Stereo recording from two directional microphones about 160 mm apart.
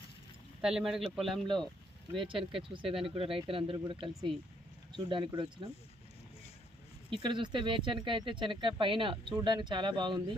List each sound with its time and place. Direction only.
0.6 s speech: 5° right (ahead or behind)
2.2 s speech: 30° right (ahead or behind)
7.1 s speech: 30° right (ahead or behind)